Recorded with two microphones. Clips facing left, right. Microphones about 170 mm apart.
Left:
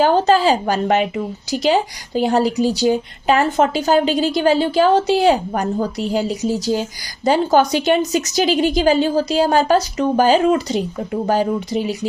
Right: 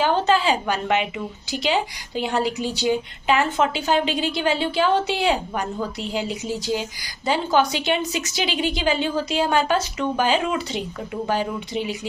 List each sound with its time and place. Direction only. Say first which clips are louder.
0.0 s a woman's voice: left 6 dB; 40° left (ahead or behind)